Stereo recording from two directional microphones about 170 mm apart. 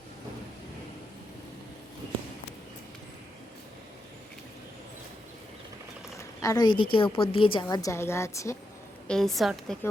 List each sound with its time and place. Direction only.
6.1 s a sound: 20° left (ahead or behind)
6.9 s a woman's voice: 30° left (ahead or behind)
9.0 s a woman's voice: centre (ahead or behind)